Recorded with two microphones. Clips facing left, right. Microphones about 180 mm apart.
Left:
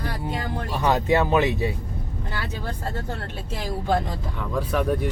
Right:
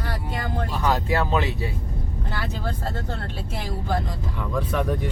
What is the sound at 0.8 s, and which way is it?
Speech, 20° left (ahead or behind).